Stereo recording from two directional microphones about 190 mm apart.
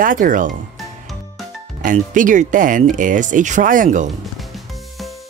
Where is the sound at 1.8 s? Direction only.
45° right (ahead or behind).